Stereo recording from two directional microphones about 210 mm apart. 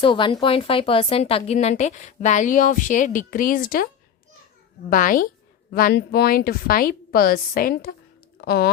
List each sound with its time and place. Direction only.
0.0 s speech: 25° left (ahead or behind); by 3.8 s 45° left (ahead or behind)
4.9 s a woman's voice: 40° left (ahead or behind)